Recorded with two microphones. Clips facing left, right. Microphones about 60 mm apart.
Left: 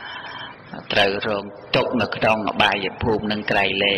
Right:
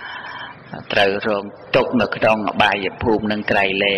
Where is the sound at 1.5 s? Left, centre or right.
Right.